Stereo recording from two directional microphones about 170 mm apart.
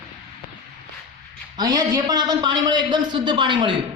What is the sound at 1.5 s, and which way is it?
A man's voice, 25° right (ahead or behind).